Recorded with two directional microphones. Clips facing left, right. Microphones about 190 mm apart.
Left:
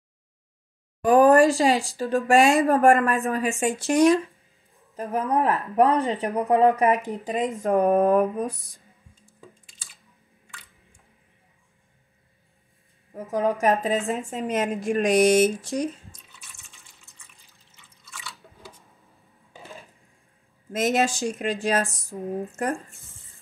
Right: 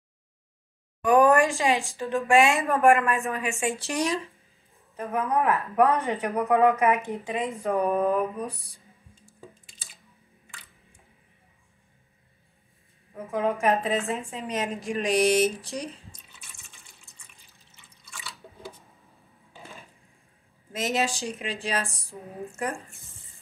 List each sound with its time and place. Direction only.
1.0 s speech: 35° left (ahead or behind)
3.8 s a woman's voice: 50° left (ahead or behind)
4.9 s speech: 30° left (ahead or behind)
13.3 s a woman's voice: 40° left (ahead or behind)
20.7 s a woman's voice: 50° left (ahead or behind)